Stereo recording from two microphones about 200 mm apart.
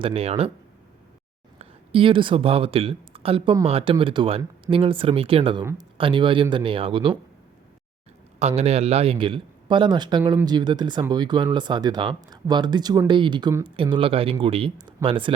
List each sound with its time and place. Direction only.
0.0 s speech: 30° right (ahead or behind)
1.5 s speech: 25° right (ahead or behind)
8.4 s speech: 30° right (ahead or behind); by 13.7 s 15° right (ahead or behind)
13.9 s speech: 30° right (ahead or behind)